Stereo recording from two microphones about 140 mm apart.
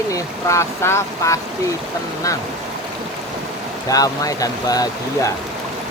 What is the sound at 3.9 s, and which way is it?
Speech, 25° left (ahead or behind).